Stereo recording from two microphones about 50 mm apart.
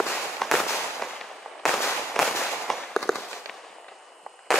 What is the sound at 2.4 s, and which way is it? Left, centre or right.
Firecracker, centre.